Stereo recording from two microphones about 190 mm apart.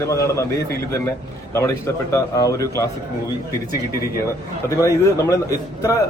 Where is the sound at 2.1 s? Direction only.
15° left (ahead or behind).